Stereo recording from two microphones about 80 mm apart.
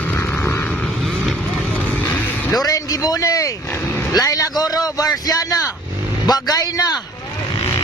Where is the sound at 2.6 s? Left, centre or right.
Left.